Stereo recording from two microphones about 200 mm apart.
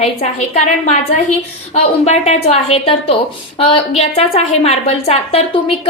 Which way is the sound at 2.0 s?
35° left (ahead or behind).